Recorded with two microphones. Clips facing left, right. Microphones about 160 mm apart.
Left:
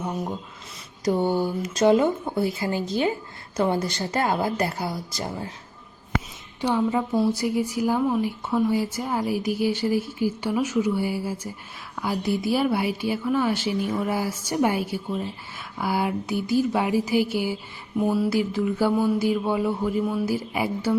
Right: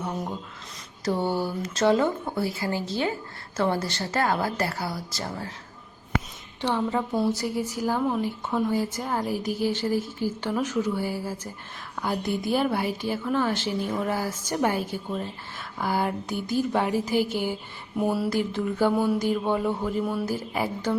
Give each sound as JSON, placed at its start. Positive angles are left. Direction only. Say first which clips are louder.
{"t": 0.0, "sound": "a woman's voice", "louder": "left 2 dB", "side_deg": 15}
{"t": 6.6, "sound": "a woman's voice", "louder": "left 3 dB", "side_deg": 10}
{"t": 17.9, "sound": "a sound", "louder": "left 3 dB", "side_deg": -5}
{"t": 20.3, "sound": "a woman's voice", "louder": "left 2 dB", "side_deg": 10}